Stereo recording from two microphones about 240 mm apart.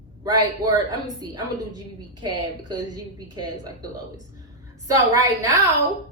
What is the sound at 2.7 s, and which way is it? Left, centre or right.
Speech, centre.